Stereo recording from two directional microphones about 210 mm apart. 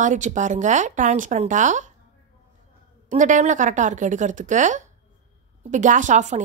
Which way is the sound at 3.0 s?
35° right (ahead or behind).